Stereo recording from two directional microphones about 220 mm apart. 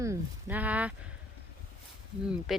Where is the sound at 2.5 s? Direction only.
Centre (ahead or behind).